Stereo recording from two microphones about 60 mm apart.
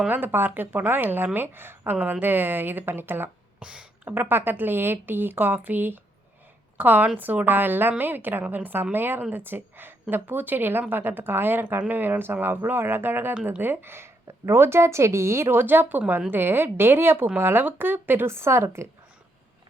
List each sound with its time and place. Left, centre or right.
0.1 s a woman's voice: right
3.6 s a sound: centre
4.1 s a woman's voice: right
13.3 s speech: right
13.6 s a woman's voice: right